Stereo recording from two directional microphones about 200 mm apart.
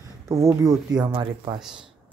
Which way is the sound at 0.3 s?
15° right (ahead or behind).